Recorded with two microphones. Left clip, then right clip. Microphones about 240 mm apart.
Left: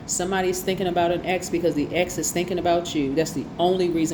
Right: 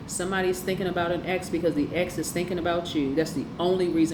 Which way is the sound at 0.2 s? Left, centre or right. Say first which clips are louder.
Left 2 dB; left.